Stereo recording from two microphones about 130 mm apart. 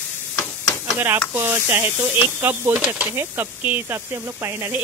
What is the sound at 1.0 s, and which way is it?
Speech, 15° right (ahead or behind).